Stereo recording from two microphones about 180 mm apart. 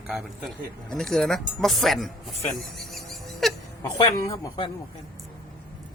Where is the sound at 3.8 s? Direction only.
20° left (ahead or behind).